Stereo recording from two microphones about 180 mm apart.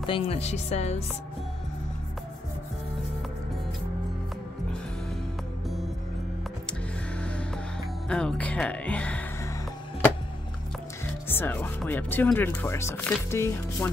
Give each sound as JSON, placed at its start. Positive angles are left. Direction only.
{"t": 0.0, "sound": "music", "side_deg": 30}
{"t": 7.2, "sound": "music", "side_deg": 5}
{"t": 8.1, "sound": "speech", "side_deg": 5}
{"t": 11.2, "sound": "speech", "side_deg": 10}